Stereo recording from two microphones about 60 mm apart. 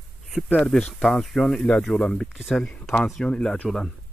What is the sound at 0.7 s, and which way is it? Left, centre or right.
Speech, centre.